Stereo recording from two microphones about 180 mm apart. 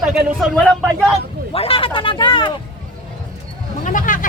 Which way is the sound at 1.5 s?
30° left (ahead or behind).